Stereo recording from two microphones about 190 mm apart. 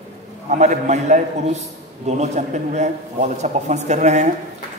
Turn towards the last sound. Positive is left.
turn(degrees=-40)  # may be behind; listen again after turning